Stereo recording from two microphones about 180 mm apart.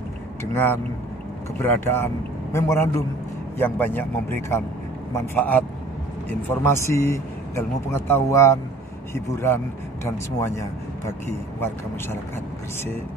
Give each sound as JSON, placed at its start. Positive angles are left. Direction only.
{"t": 0.4, "sound": "speech", "side_deg": 15}